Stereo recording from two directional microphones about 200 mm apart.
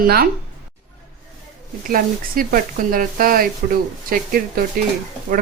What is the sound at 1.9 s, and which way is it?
Speech, 45° right (ahead or behind).